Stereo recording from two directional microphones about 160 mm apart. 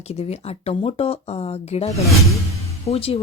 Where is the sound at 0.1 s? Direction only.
40° left (ahead or behind).